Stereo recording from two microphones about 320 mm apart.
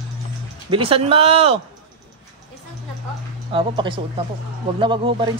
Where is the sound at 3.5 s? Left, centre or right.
Centre.